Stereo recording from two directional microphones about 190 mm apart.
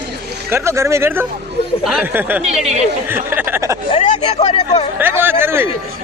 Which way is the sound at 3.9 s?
35° left (ahead or behind).